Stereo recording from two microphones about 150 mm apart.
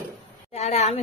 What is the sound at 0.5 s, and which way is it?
Speech, 45° left (ahead or behind).